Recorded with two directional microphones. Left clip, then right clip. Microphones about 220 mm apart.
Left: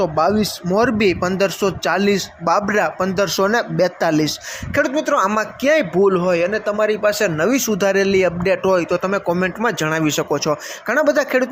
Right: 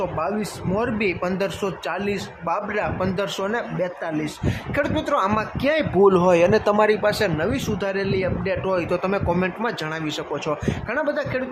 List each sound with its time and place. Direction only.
0.0 s a man's voice: 20° left (ahead or behind)
4.7 s speech: 15° left (ahead or behind)
6.0 s speech: centre (ahead or behind); by 11.4 s 25° left (ahead or behind)